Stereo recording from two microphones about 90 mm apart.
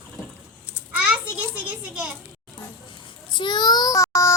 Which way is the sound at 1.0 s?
15° right (ahead or behind).